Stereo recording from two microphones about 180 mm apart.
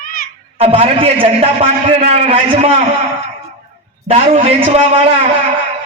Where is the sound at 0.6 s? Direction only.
30° right (ahead or behind).